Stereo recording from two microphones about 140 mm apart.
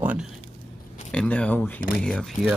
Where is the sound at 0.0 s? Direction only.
10° right (ahead or behind).